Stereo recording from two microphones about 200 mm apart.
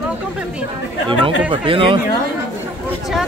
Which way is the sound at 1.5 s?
25° right (ahead or behind).